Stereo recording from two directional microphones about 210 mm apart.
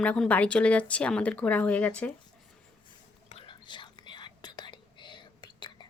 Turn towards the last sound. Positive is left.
turn(degrees=20)  # may be behind; listen again after turning